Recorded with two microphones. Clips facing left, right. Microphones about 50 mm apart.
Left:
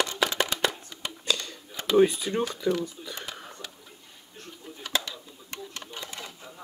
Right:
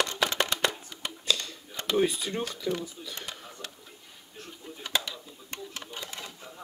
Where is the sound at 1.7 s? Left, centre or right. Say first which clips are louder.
Left 5 dB; centre.